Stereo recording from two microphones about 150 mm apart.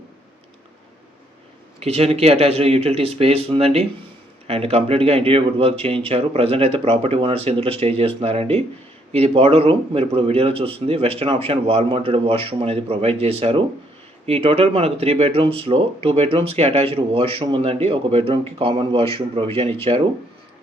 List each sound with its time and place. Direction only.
1.8 s speech: 45° right (ahead or behind)